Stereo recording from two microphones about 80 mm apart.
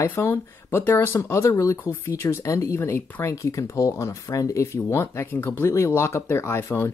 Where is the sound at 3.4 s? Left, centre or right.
Left.